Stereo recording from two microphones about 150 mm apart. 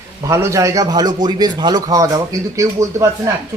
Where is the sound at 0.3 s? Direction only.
20° right (ahead or behind).